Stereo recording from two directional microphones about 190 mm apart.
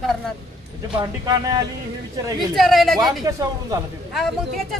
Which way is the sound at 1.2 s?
20° right (ahead or behind).